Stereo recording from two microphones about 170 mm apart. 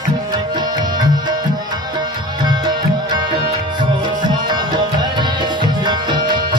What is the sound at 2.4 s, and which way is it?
Music, 25° right (ahead or behind).